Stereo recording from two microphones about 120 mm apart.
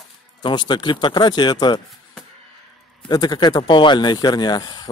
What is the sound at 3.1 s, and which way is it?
Speech, 35° left (ahead or behind).